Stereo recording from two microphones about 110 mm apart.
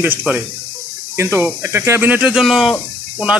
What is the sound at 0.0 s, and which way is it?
Speech, 15° right (ahead or behind).